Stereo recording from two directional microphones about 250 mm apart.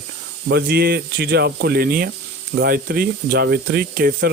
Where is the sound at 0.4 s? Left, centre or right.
Right.